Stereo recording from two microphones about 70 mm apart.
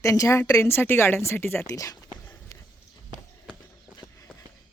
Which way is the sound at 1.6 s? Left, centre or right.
Left.